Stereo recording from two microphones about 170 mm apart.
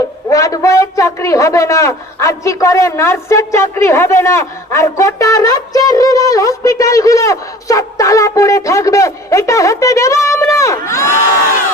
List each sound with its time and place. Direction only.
0.3 s a man's voice: 20° left (ahead or behind)